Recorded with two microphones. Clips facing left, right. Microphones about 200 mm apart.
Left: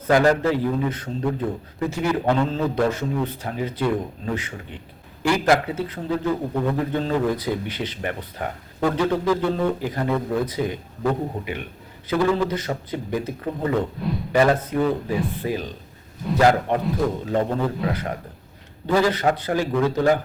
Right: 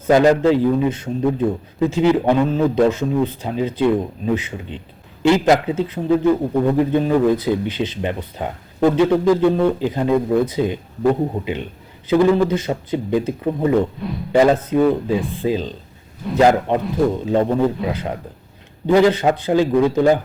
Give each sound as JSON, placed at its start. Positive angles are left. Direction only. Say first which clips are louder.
{"t": 0.1, "sound": "a man's voice", "louder": "right 5 dB", "side_deg": -20}
{"t": 14.0, "sound": "a man's voice", "louder": "even", "side_deg": 0}
{"t": 14.3, "sound": "a man's voice", "louder": "right 5 dB", "side_deg": -20}